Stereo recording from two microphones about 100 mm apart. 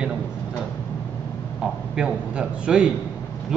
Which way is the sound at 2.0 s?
10° right (ahead or behind).